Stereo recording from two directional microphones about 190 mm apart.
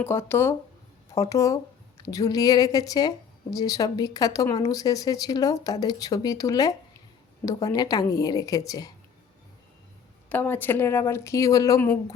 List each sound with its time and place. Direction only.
0.0 s speech: 10° left (ahead or behind)
10.2 s speech: 10° left (ahead or behind)